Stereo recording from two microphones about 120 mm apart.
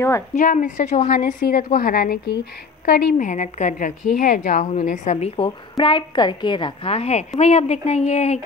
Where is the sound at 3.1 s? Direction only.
90° left; by 5.5 s 55° left (ahead or behind).